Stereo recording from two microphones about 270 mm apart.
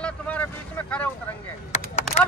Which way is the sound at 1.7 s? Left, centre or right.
Left.